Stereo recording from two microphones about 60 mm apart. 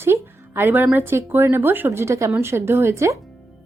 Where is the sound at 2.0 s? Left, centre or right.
Right.